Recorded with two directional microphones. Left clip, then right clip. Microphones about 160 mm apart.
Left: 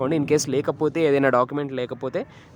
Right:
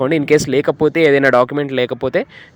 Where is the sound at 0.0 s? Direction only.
25° right (ahead or behind).